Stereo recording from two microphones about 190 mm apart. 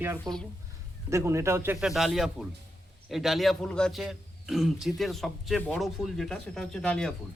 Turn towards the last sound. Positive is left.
turn(degrees=5)  # may be behind; listen again after turning